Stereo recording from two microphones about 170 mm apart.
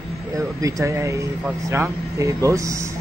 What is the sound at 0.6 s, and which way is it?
A man's voice, 20° right (ahead or behind).